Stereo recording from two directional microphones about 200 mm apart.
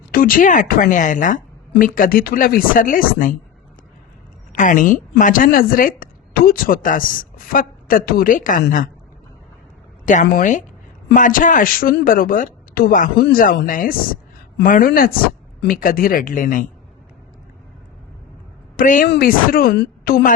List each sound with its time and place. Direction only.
0.1 s a woman's voice: 45° left (ahead or behind)
4.5 s speech: 40° left (ahead or behind)
10.1 s a woman's voice: 40° left (ahead or behind)
18.8 s a woman's voice: 40° left (ahead or behind)
19.0 s a woman's voice: 50° left (ahead or behind)